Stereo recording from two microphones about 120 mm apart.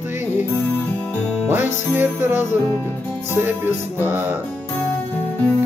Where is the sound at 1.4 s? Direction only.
20° right (ahead or behind).